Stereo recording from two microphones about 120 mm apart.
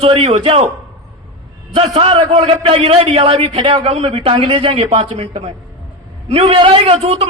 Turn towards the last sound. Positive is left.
turn(degrees=-55)  # may be behind; listen again after turning